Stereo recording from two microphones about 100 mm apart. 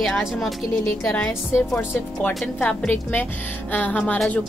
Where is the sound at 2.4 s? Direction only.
5° left (ahead or behind).